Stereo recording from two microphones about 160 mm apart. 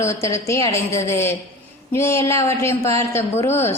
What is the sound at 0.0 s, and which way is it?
A woman's voice, 20° left (ahead or behind).